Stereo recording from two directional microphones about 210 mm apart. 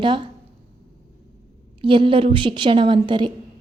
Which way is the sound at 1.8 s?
25° right (ahead or behind).